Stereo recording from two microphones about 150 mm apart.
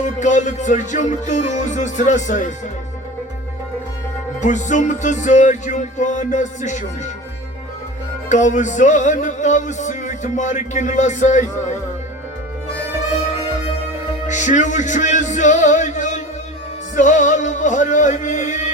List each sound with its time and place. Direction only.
0.0 s music: 55° left (ahead or behind)
4.4 s music: 55° left (ahead or behind)
8.3 s music: 55° left (ahead or behind)
14.3 s music: 55° left (ahead or behind)